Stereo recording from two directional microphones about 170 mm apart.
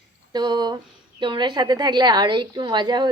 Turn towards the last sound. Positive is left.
turn(degrees=-25)  # may be behind; listen again after turning